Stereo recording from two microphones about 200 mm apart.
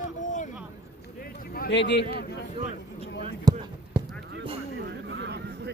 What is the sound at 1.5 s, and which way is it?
Speech, 55° left (ahead or behind).